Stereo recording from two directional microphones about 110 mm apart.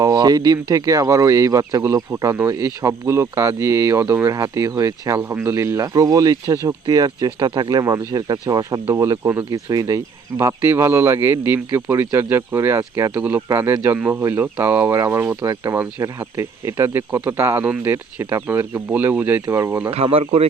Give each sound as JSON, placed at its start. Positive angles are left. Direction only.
{"t": 0.0, "sound": "speech", "side_deg": -35}
{"t": 2.3, "sound": "speech", "side_deg": -20}
{"t": 19.5, "sound": "speech", "side_deg": -25}
{"t": 19.9, "sound": "speech", "side_deg": -65}